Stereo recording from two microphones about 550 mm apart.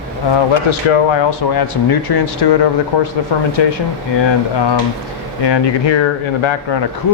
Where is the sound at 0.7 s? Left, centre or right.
Left.